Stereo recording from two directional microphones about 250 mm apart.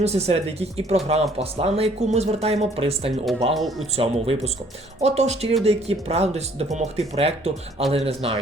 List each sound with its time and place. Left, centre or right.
0.0 s speech: right
3.5 s speech: centre
3.9 s speech: right